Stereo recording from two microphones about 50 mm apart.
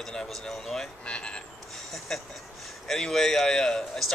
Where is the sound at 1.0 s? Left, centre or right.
Centre.